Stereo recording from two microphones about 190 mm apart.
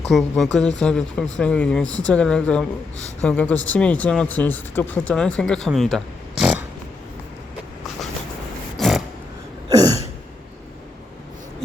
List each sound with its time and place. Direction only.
0.1 s speech: centre (ahead or behind)
8.8 s a sound: centre (ahead or behind)
9.6 s throat clearing: 20° right (ahead or behind)